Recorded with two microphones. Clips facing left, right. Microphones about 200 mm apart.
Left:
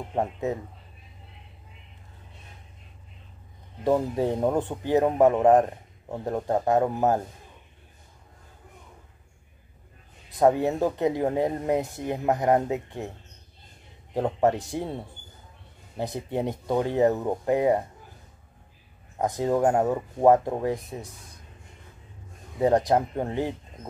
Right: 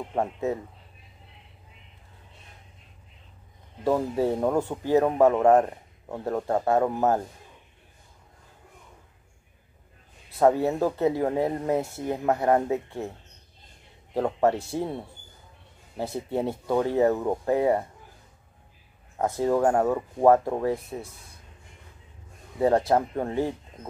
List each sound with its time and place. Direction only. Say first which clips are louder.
0.1 s a man's voice: even; 15° left (ahead or behind)
4.4 s a man's voice: even; 15° left (ahead or behind)
10.3 s a man's voice: even; 15° left (ahead or behind)
14.1 s a man's voice: even; 15° left (ahead or behind)
16.0 s a man's voice: right 1 dB; 15° left (ahead or behind)
19.1 s a man's voice: right 1 dB; 15° left (ahead or behind)
22.6 s a man's voice: even; 15° left (ahead or behind)